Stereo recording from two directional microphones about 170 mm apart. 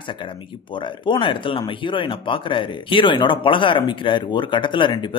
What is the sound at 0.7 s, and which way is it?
Speech, 30° left (ahead or behind).